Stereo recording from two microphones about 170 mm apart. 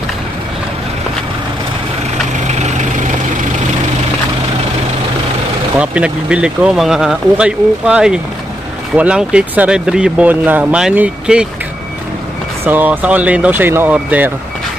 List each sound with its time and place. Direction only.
2.4 s vehicle: 45° right (ahead or behind)
5.8 s speech: 5° right (ahead or behind)
12.6 s speech: 10° right (ahead or behind)